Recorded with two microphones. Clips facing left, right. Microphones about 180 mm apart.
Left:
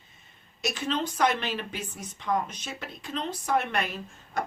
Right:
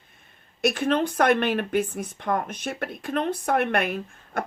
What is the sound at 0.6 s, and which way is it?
Speech, 55° right (ahead or behind).